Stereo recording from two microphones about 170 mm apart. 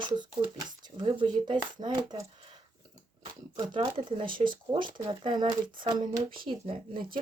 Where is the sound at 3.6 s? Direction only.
30° right (ahead or behind).